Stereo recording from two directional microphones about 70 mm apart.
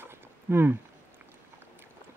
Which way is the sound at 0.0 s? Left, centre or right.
Right.